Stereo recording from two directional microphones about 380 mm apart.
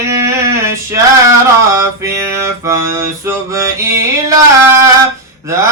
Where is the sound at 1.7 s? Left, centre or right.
Centre.